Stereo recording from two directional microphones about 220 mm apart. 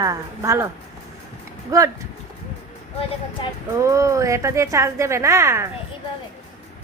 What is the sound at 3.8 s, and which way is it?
A woman's voice, 15° right (ahead or behind).